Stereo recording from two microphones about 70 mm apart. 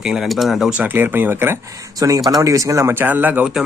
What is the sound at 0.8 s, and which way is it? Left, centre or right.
Speech, right.